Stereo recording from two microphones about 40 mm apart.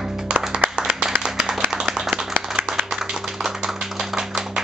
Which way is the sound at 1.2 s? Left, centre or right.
Centre.